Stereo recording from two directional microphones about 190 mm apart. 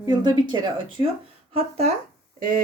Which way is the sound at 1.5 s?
35° right (ahead or behind).